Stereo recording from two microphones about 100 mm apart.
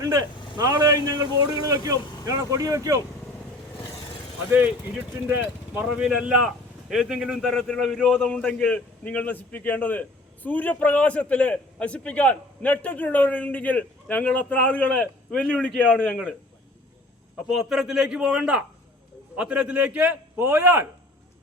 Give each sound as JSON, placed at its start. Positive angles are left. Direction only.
{"t": 0.0, "sound": "a man's voice", "side_deg": -40}
{"t": 5.3, "sound": "speech", "side_deg": -20}
{"t": 5.8, "sound": "a man's voice", "side_deg": -5}
{"t": 8.2, "sound": "a man's voice", "side_deg": 10}
{"t": 17.5, "sound": "a man's voice", "side_deg": -5}